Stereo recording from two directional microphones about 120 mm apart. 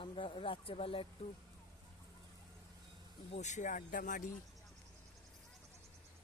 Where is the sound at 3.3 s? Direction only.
75° left (ahead or behind).